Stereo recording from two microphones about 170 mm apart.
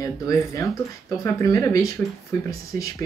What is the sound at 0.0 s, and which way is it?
Speech, 20° left (ahead or behind).